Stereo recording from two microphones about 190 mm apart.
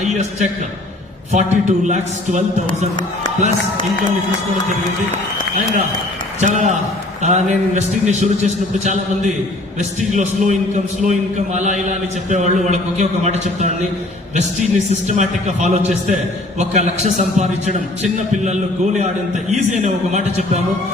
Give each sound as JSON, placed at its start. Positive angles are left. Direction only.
{"t": 1.3, "sound": "a man's voice", "side_deg": -40}
{"t": 6.4, "sound": "a man's voice", "side_deg": -40}